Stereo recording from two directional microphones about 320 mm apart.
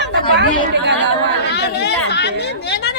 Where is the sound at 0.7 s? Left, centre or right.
Right.